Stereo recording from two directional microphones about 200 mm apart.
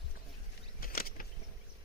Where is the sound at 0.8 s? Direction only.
45° left (ahead or behind).